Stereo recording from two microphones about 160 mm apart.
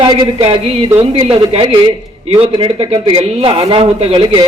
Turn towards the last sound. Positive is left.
turn(degrees=-35)  # may be behind; listen again after turning